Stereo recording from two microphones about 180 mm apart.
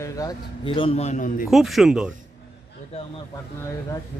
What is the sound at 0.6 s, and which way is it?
Speech, 30° left (ahead or behind).